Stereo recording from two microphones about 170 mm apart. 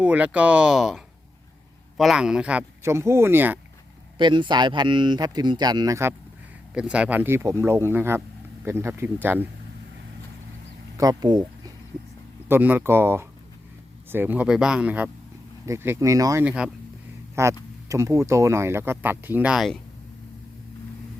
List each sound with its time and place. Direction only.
0.0 s speech: 10° right (ahead or behind)
4.2 s speech: 25° right (ahead or behind)
6.7 s speech: 5° right (ahead or behind)
10.9 s speech: 20° right (ahead or behind)
12.5 s speech: 10° right (ahead or behind)
16.5 s speech: 5° right (ahead or behind)
17.3 s speech: 15° right (ahead or behind); by 19.8 s centre (ahead or behind)